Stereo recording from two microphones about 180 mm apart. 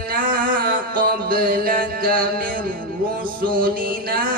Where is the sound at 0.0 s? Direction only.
50° right (ahead or behind).